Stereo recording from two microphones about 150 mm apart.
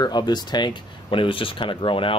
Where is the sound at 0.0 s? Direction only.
30° left (ahead or behind).